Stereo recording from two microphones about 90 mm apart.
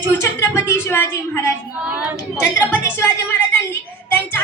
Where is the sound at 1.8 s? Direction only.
15° right (ahead or behind).